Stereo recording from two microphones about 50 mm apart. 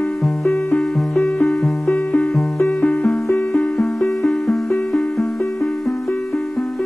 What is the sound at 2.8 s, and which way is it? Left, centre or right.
Music, centre.